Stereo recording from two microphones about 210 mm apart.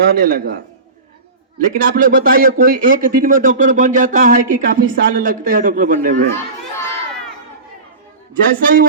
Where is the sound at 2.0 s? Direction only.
45° right (ahead or behind).